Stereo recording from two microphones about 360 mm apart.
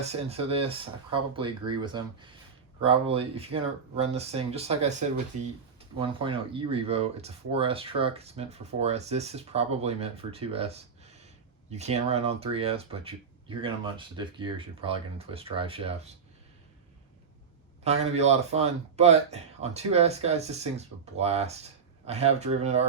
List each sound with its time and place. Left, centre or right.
0.0 s speech: centre
18.0 s speech: centre